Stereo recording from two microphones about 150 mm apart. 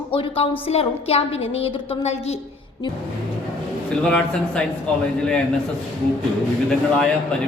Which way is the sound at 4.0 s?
5° left (ahead or behind).